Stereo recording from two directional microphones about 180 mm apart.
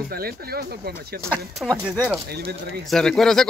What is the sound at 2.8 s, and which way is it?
Speech, centre (ahead or behind).